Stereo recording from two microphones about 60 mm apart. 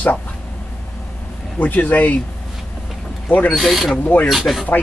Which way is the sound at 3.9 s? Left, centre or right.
Left.